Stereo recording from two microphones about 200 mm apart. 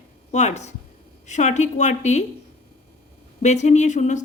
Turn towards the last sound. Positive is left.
turn(degrees=35)  # may be behind; listen again after turning